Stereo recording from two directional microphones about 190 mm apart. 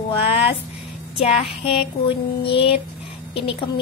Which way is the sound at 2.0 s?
30° left (ahead or behind).